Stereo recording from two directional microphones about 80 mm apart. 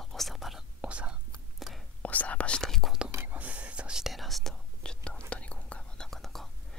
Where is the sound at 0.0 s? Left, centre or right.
Centre.